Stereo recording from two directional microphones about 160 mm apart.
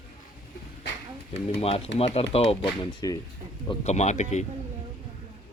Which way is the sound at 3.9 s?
45° left (ahead or behind).